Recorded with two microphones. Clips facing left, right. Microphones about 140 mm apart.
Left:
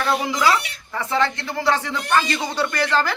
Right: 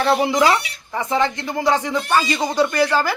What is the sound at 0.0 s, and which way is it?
Speech, 30° right (ahead or behind).